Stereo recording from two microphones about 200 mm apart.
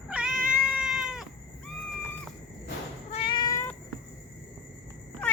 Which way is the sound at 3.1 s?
25° left (ahead or behind).